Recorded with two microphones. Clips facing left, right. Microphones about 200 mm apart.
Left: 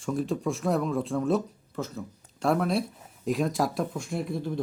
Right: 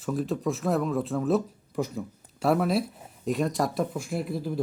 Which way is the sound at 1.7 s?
15° right (ahead or behind).